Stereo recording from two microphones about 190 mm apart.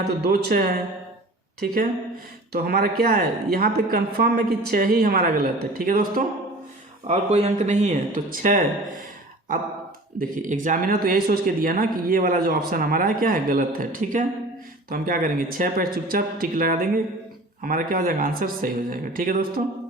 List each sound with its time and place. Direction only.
0.2 s speech: 55° right (ahead or behind)
2.5 s speech: 55° right (ahead or behind)
7.1 s speech: 35° right (ahead or behind)
10.2 s speech: 45° right (ahead or behind)